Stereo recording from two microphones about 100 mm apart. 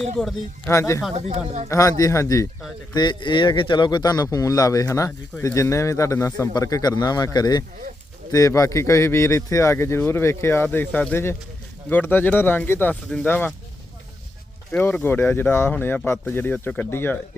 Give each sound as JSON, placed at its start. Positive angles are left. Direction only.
{"t": 0.0, "sound": "speech", "side_deg": 5}
{"t": 0.7, "sound": "a man's voice", "side_deg": 30}
{"t": 2.9, "sound": "a man's voice", "side_deg": 45}
{"t": 14.7, "sound": "speech", "side_deg": 20}